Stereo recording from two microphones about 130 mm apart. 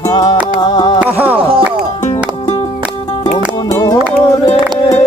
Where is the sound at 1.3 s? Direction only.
45° right (ahead or behind).